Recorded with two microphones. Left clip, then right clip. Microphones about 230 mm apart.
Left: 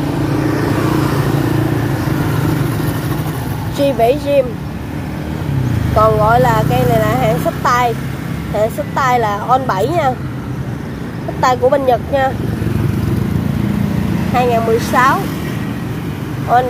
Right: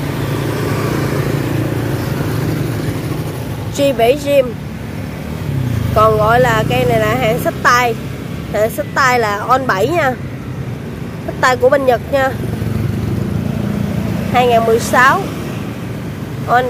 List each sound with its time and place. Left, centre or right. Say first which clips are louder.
3.7 s speech: right 1 dB; centre
5.9 s speech: right 1 dB; right
11.4 s speech: right 1 dB; centre
14.3 s speech: right 3 dB; centre